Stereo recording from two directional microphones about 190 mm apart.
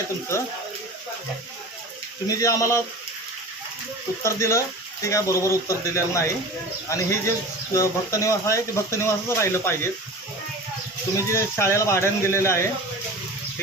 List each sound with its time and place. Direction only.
2.2 s a man's voice: 15° left (ahead or behind)
4.2 s a man's voice: 15° left (ahead or behind)
11.3 s a man's voice: 15° left (ahead or behind)